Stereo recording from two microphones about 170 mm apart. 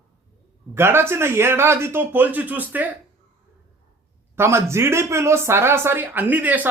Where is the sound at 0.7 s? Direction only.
15° right (ahead or behind).